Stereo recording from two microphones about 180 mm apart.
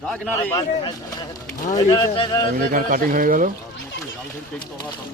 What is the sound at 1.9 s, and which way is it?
Speech, 20° left (ahead or behind).